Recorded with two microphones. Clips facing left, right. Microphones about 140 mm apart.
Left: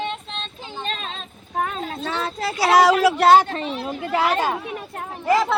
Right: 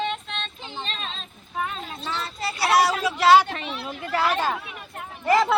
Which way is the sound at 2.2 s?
90° left.